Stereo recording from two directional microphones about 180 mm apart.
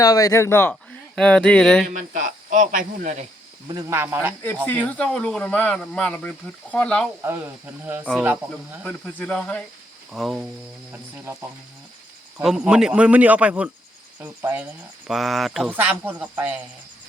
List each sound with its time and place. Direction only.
0.0 s speech: 20° left (ahead or behind); by 1.9 s 5° left (ahead or behind)
1.9 s speech: 45° right (ahead or behind)
3.7 s speech: 20° right (ahead or behind)
4.9 s speech: 5° left (ahead or behind)
7.2 s speech: 10° right (ahead or behind)
8.8 s speech: 5° left (ahead or behind)
10.1 s cricket: centre (ahead or behind)
10.9 s speech: 15° right (ahead or behind)
12.4 s speech: 5° right (ahead or behind)